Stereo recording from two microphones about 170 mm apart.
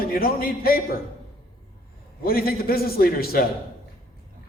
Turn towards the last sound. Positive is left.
turn(degrees=60)  # may be behind; listen again after turning